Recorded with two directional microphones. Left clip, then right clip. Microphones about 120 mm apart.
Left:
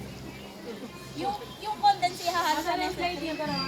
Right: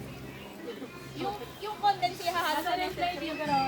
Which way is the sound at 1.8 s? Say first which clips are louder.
Left 4 dB; 20° right (ahead or behind).